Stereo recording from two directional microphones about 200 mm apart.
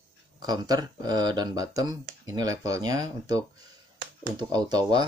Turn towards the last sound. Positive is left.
turn(degrees=-20)  # may be behind; listen again after turning